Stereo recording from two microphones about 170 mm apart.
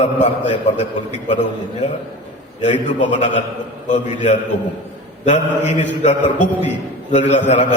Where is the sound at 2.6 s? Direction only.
45° left (ahead or behind).